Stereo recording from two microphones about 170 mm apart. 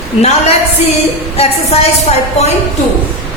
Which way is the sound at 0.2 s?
40° left (ahead or behind).